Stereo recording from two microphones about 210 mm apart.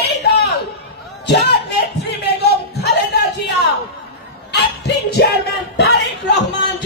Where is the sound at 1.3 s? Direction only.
55° left (ahead or behind).